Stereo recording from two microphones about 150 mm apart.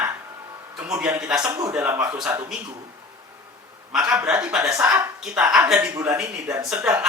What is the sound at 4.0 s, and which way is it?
Speech, 25° right (ahead or behind).